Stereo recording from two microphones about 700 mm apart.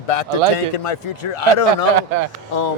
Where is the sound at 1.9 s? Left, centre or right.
Right.